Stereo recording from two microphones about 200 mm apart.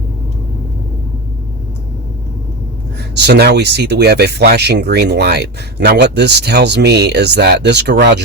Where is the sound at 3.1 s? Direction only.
55° right (ahead or behind).